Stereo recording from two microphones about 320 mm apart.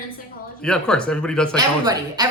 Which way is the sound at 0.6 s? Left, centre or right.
Centre.